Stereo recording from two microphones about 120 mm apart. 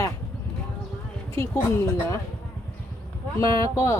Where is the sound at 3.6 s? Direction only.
25° left (ahead or behind).